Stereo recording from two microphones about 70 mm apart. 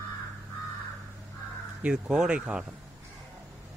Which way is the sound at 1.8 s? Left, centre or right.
Centre.